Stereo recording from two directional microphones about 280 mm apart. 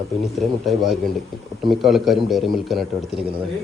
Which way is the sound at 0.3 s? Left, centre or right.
Centre.